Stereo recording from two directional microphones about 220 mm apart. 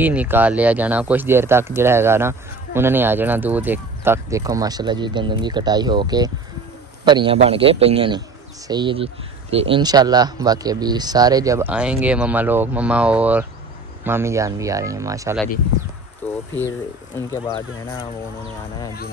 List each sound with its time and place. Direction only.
0.0 s a man's voice: 5° right (ahead or behind)
16.2 s speech: 10° left (ahead or behind)